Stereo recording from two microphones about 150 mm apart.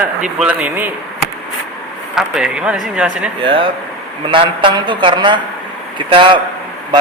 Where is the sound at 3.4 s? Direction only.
35° right (ahead or behind).